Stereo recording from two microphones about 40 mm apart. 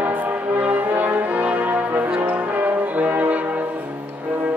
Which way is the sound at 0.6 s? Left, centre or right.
Right.